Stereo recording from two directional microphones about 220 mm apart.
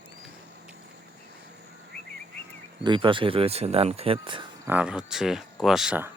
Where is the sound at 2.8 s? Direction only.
20° right (ahead or behind).